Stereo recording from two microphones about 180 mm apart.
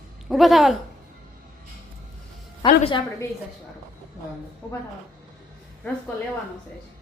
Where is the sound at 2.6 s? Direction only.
30° left (ahead or behind).